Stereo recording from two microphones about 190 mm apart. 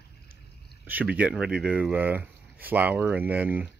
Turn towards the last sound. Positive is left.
turn(degrees=-10)  # may be behind; listen again after turning